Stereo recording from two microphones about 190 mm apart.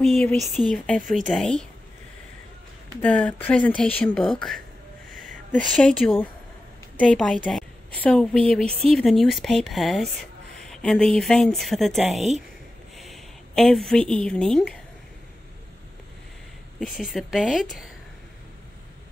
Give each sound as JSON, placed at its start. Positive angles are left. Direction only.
{"t": 0.0, "sound": "speech", "side_deg": 0}
{"t": 1.0, "sound": "speech", "side_deg": -40}
{"t": 1.3, "sound": "speech", "side_deg": 0}
{"t": 3.0, "sound": "speech", "side_deg": 5}
{"t": 5.1, "sound": "a sound", "side_deg": -45}
{"t": 5.7, "sound": "a woman's voice", "side_deg": 5}
{"t": 16.8, "sound": "speech", "side_deg": 0}